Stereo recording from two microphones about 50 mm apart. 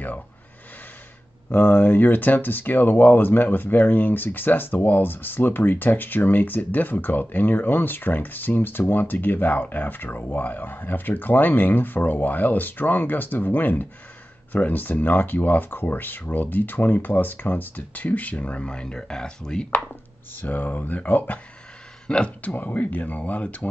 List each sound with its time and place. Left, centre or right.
1.5 s speech: left; by 19.8 s centre
20.3 s speech: left
22.0 s speech: left